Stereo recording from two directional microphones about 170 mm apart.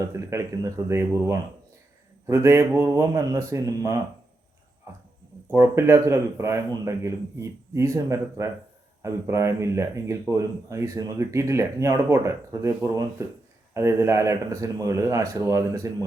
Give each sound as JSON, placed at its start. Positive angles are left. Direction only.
{"t": 0.0, "sound": "speech", "side_deg": -15}
{"t": 5.5, "sound": "speech", "side_deg": -15}